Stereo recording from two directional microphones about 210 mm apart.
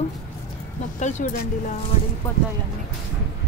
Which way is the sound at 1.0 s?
35° left (ahead or behind).